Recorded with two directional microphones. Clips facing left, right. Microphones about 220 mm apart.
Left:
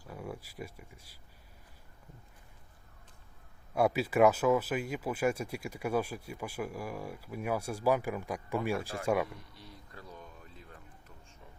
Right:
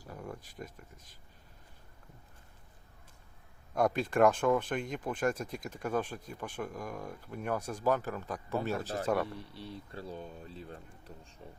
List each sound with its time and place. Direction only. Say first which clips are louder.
0.1 s speech: left 2 dB; 5° left (ahead or behind)
3.8 s speech: left 1 dB; 10° left (ahead or behind)
9.2 s speech: right 3 dB; 30° right (ahead or behind)